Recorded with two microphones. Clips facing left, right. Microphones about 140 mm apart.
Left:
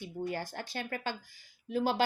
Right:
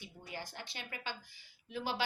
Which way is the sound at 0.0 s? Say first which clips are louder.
Left 10 dB; 50° left (ahead or behind).